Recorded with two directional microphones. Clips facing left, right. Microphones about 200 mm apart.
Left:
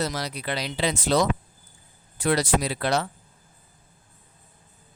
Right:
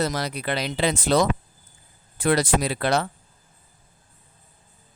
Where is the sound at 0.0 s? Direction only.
55° right (ahead or behind).